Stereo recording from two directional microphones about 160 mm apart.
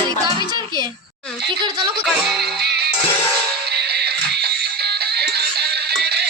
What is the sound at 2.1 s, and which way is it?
Speech, centre (ahead or behind).